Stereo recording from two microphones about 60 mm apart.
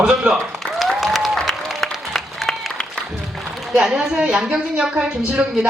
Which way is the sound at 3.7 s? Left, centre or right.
Centre.